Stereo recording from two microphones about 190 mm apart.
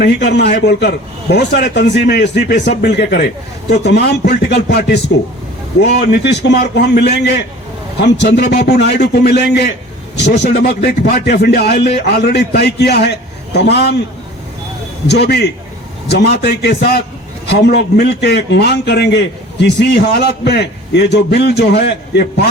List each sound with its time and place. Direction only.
0.0 s a man's voice: 60° left (ahead or behind)
15.0 s a man's voice: 60° left (ahead or behind)